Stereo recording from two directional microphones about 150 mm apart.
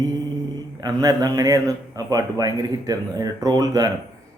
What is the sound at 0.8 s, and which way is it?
Music, 25° right (ahead or behind).